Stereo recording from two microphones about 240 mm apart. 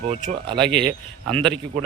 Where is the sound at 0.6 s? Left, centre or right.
Centre.